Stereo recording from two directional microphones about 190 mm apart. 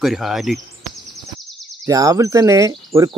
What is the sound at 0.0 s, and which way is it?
Speech, centre (ahead or behind).